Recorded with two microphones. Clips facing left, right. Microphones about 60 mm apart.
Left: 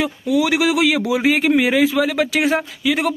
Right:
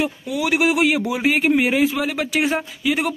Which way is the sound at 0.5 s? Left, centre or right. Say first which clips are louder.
Right 4 dB; left.